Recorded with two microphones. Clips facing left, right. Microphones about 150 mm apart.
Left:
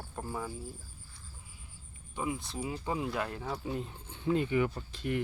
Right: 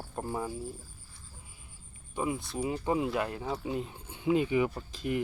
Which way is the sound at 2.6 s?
20° right (ahead or behind).